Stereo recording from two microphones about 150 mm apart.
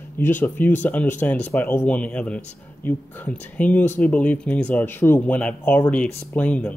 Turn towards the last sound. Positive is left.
turn(degrees=10)  # may be behind; listen again after turning